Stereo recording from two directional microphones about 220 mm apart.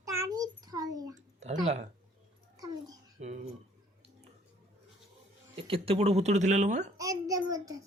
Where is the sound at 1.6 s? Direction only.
30° right (ahead or behind).